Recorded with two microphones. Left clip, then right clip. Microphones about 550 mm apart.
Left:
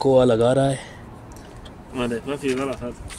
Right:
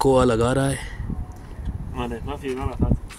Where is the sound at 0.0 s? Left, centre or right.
Right.